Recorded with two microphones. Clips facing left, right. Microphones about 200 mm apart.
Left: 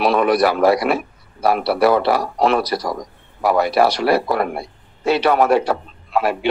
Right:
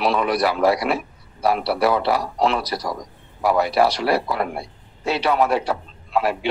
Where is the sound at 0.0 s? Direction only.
55° left (ahead or behind).